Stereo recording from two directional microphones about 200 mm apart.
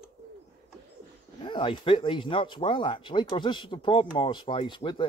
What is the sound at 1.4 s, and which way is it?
Speech, 25° left (ahead or behind).